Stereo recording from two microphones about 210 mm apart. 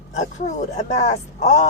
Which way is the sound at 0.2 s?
35° left (ahead or behind).